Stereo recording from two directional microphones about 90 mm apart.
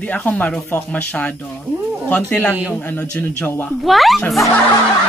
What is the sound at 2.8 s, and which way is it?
Speech, 20° left (ahead or behind).